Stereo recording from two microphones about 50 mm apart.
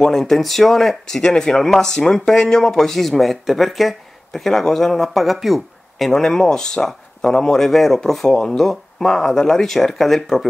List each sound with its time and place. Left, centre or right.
0.0 s speech: centre